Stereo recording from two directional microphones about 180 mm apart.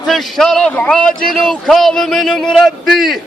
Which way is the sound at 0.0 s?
Centre (ahead or behind).